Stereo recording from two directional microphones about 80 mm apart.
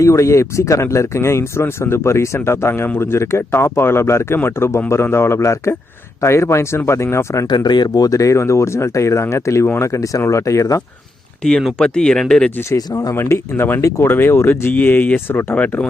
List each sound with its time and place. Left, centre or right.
0.0 s speech: left
7.4 s speech: left
11.4 s speech: centre
12.6 s speech: left
13.1 s speech: left
13.8 s speech: left
14.1 s speech: left